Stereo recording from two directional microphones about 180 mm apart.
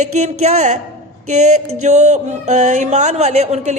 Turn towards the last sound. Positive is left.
turn(degrees=-40)  # may be behind; listen again after turning